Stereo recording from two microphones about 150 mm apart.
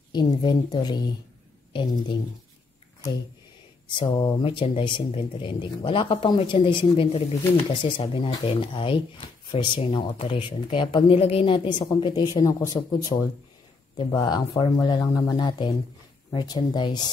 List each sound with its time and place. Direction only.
0.1 s speech: 30° left (ahead or behind)
3.9 s speech: 35° left (ahead or behind)